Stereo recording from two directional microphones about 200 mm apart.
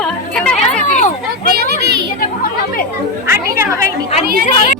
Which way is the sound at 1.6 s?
55° right (ahead or behind).